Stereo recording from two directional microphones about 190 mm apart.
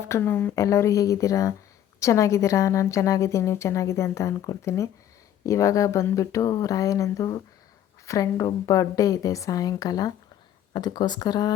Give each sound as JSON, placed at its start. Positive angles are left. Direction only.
{"t": 0.0, "sound": "a woman's voice", "side_deg": 15}